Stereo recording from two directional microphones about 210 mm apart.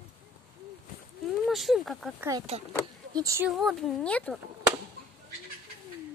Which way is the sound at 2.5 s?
30° right (ahead or behind).